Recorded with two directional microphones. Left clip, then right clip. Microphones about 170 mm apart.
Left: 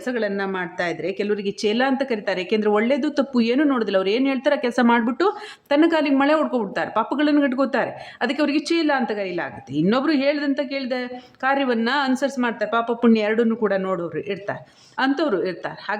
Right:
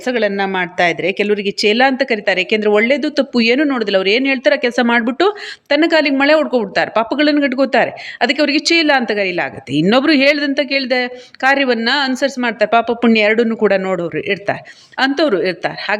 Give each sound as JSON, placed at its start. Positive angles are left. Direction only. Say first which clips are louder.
{"t": 0.0, "sound": "speech", "louder": "right 8 dB", "side_deg": -15}